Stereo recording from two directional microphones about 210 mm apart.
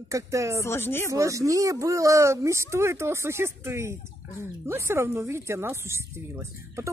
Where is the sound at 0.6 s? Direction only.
10° left (ahead or behind).